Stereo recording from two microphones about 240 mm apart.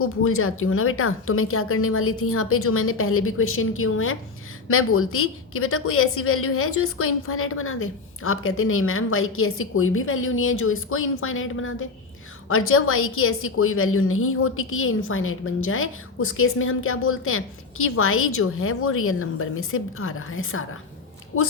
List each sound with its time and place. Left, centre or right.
0.0 s a woman's voice: left